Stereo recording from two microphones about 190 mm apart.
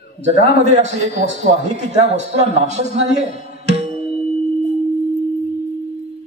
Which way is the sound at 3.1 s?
35° right (ahead or behind).